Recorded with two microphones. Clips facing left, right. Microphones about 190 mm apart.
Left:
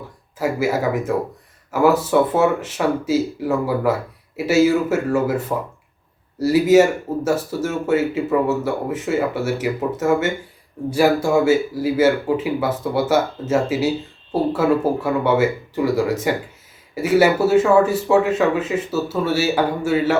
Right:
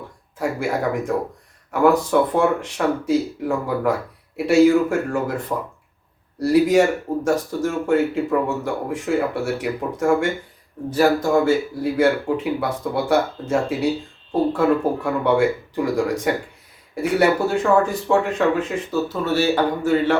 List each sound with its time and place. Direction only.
0.3 s speech: 5° left (ahead or behind)